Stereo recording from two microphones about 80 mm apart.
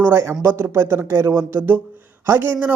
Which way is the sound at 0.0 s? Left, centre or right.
Right.